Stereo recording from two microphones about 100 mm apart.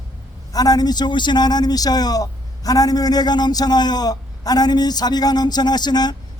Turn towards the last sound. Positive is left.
turn(degrees=45)  # may be behind; listen again after turning